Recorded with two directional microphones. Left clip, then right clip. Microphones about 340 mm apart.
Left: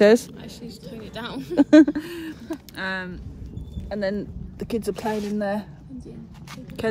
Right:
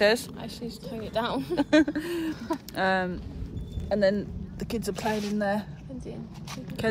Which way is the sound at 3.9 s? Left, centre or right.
Centre.